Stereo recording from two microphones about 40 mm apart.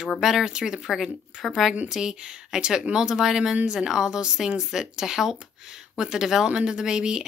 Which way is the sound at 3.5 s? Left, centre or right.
Right.